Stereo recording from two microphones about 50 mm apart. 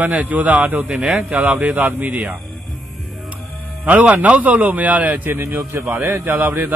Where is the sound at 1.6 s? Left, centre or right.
Right.